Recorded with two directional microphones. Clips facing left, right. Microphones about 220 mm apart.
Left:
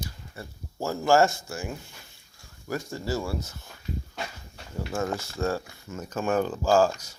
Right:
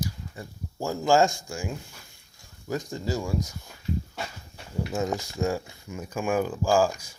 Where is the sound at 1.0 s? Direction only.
15° right (ahead or behind).